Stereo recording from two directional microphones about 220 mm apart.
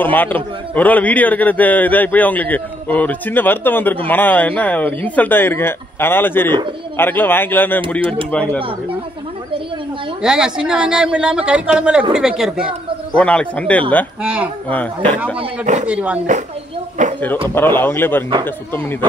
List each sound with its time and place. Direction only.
0.0 s a man's voice: 10° left (ahead or behind)
10.2 s speech: 5° right (ahead or behind)
14.2 s speech: 5° right (ahead or behind)
14.7 s a man's voice: 5° left (ahead or behind)
15.6 s speech: 35° right (ahead or behind)
15.9 s speech: 5° right (ahead or behind)
17.0 s speech: 35° right (ahead or behind)
17.6 s a man's voice: 10° left (ahead or behind)